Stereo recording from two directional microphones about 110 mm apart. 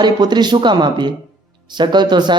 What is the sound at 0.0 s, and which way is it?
A woman's voice, 40° right (ahead or behind).